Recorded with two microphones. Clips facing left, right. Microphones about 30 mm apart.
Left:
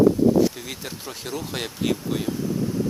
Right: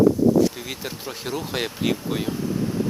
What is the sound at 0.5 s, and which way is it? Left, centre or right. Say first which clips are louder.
Speech: right 2 dB; centre.